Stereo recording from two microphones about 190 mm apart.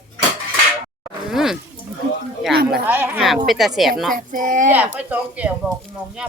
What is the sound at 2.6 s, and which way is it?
Speech, 5° right (ahead or behind).